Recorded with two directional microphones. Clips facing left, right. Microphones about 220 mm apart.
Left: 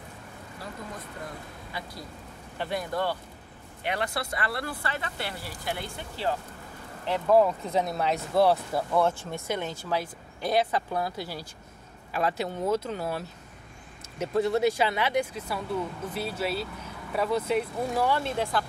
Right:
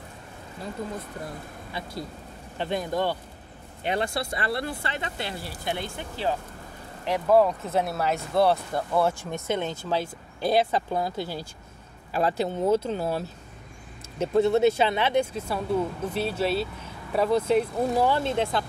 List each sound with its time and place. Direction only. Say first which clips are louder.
1.7 s speech: right 5 dB; 25° right (ahead or behind)
7.1 s speech: right 1 dB; 5° right (ahead or behind)
9.2 s speech: right 3 dB; 20° right (ahead or behind)